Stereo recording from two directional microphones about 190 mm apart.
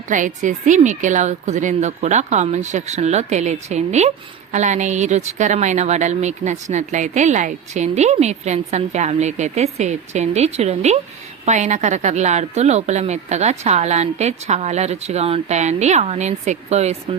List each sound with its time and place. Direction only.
0.1 s speech: 40° right (ahead or behind)